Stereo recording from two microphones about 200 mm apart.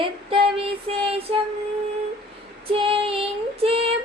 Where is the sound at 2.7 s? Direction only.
25° right (ahead or behind).